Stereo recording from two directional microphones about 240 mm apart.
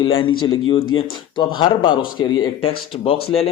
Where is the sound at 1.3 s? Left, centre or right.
Left.